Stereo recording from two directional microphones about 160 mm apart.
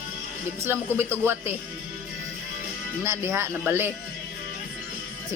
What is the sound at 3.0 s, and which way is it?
Speech, 15° right (ahead or behind).